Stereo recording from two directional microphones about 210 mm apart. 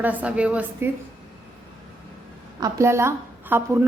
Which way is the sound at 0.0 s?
5° right (ahead or behind).